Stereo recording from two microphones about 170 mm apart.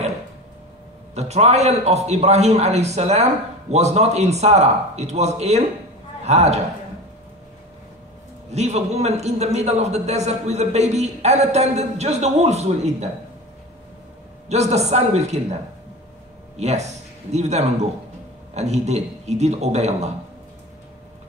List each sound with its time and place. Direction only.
1.1 s a man's voice: 40° right (ahead or behind)
8.5 s a man's voice: 40° right (ahead or behind)
14.5 s a man's voice: 40° right (ahead or behind)
16.5 s a man's voice: 40° right (ahead or behind)